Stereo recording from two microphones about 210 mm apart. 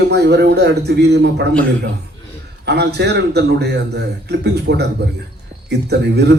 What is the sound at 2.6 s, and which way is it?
Speech, 50° right (ahead or behind).